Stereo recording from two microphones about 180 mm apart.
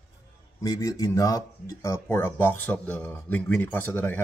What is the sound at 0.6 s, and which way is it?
Speech, 20° left (ahead or behind).